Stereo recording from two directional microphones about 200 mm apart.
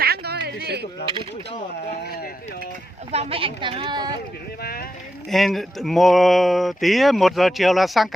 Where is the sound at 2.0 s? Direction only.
50° left (ahead or behind).